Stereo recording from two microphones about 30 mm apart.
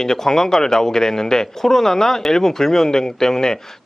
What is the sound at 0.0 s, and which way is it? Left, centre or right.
A man's voice, centre.